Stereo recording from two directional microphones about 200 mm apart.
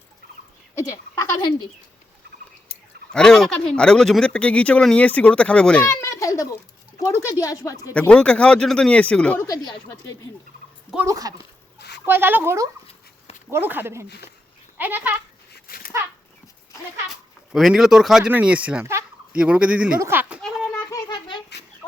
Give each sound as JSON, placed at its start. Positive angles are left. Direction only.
{"t": 1.1, "sound": "speech", "side_deg": 15}
{"t": 2.6, "sound": "speech", "side_deg": 5}
{"t": 6.1, "sound": "a sound", "side_deg": 15}
{"t": 7.0, "sound": "speech", "side_deg": 15}
{"t": 7.9, "sound": "speech", "side_deg": 5}
{"t": 10.9, "sound": "speech", "side_deg": -15}
{"t": 11.8, "sound": "a sound", "side_deg": 60}
{"t": 12.0, "sound": "speech", "side_deg": -10}
{"t": 15.5, "sound": "dog", "side_deg": 45}
{"t": 17.5, "sound": "speech", "side_deg": 0}
{"t": 20.9, "sound": "a sound", "side_deg": 25}